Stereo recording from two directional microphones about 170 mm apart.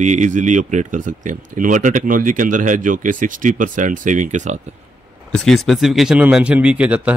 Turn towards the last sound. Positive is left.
turn(degrees=-10)  # may be behind; listen again after turning